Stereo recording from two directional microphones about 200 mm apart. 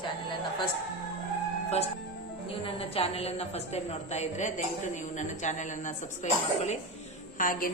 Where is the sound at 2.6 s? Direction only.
30° left (ahead or behind).